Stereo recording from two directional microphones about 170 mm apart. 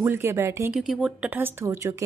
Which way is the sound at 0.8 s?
5° right (ahead or behind).